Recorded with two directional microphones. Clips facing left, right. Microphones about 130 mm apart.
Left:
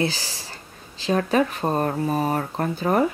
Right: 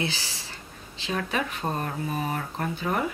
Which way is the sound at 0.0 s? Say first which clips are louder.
Left 6 dB; 40° left (ahead or behind).